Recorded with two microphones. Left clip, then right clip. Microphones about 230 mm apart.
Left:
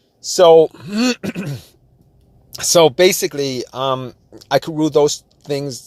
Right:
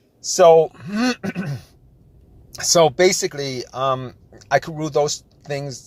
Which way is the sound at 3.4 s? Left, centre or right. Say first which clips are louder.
Left 2 dB; left.